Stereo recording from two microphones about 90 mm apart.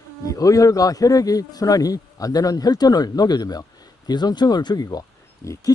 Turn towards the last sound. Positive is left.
turn(degrees=40)  # may be behind; listen again after turning